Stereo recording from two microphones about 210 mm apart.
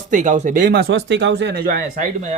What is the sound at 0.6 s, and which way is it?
Speech, 50° right (ahead or behind).